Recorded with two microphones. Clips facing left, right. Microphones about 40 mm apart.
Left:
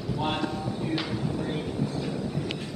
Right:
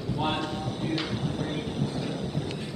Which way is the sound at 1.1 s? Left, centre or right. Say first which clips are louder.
Left 1 dB; right.